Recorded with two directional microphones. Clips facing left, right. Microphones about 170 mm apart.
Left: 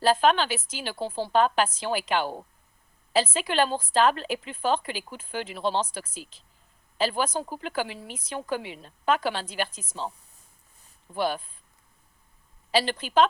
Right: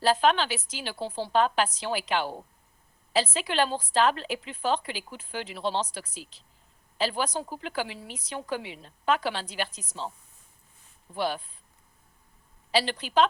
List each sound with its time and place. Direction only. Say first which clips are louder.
0.0 s a woman's voice: left 2 dB; 50° left (ahead or behind)
11.1 s a woman's voice: left 2 dB; 50° left (ahead or behind)
12.7 s a woman's voice: left 2 dB; 50° left (ahead or behind)